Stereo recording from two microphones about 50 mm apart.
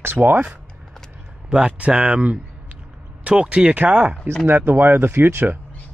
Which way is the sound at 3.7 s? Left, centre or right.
Right.